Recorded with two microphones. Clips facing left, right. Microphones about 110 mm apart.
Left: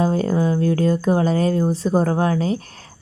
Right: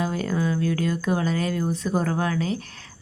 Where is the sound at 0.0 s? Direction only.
35° left (ahead or behind).